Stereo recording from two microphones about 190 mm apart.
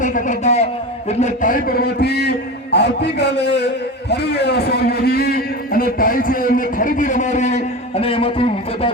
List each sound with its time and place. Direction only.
0.0 s a man's voice: 40° left (ahead or behind)